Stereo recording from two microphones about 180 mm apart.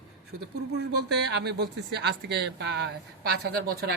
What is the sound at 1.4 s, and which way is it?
Speech, 65° right (ahead or behind).